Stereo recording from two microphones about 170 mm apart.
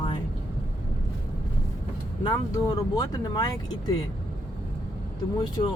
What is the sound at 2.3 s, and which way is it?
Speech, 20° left (ahead or behind).